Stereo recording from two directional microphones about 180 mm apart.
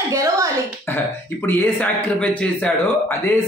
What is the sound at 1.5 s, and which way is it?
A man's voice, 10° left (ahead or behind).